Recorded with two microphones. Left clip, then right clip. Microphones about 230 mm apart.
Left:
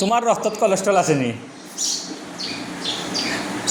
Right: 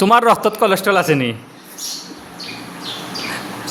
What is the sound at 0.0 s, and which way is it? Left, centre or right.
A man's voice, right.